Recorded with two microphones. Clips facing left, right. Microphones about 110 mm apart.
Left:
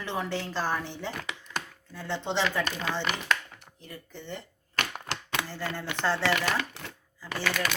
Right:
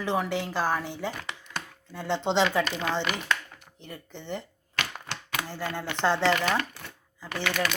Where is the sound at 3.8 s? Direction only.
20° right (ahead or behind).